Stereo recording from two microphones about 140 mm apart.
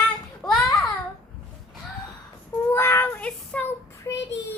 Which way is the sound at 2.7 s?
15° left (ahead or behind).